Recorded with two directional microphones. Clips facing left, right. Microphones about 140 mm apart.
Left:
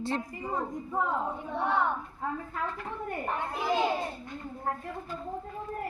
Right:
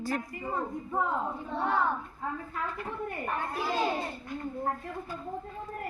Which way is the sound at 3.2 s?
20° left (ahead or behind).